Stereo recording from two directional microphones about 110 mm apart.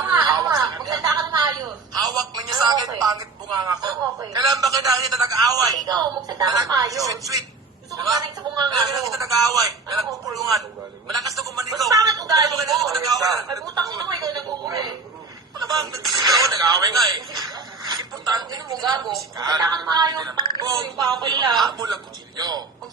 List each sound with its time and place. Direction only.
0.0 s a sound: 35° right (ahead or behind)
2.1 s speech: 35° right (ahead or behind)
11.9 s speech: 30° right (ahead or behind)
15.5 s telephone: 35° right (ahead or behind)
16.2 s speech: 35° right (ahead or behind)